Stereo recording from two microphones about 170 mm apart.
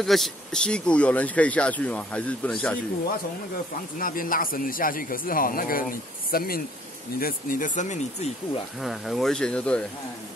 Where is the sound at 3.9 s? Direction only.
55° left (ahead or behind).